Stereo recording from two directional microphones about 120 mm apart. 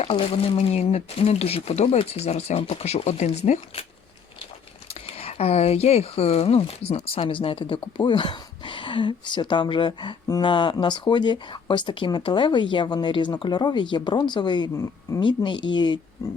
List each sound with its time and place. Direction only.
0.0 s speech: 55° left (ahead or behind); by 3.8 s 70° left (ahead or behind)
4.9 s speech: 60° left (ahead or behind); by 16.4 s 30° left (ahead or behind)